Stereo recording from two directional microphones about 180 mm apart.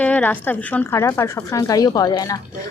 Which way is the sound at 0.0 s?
10° left (ahead or behind).